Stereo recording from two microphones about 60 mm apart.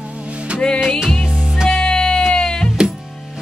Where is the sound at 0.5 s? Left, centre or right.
Centre.